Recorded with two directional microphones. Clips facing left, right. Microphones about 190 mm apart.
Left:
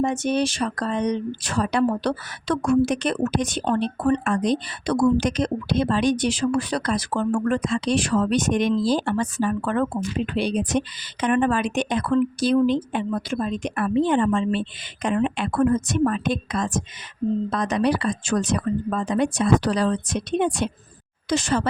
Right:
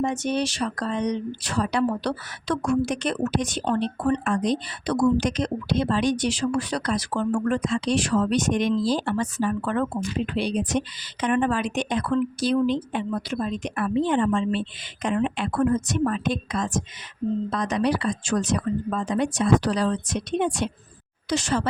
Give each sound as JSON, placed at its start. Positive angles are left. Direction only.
{"t": 0.0, "sound": "speech", "side_deg": 50}